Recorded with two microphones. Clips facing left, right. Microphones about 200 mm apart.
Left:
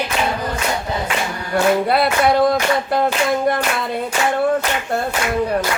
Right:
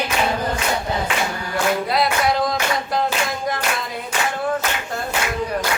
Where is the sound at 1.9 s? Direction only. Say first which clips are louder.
Left 4 dB; 60° left (ahead or behind).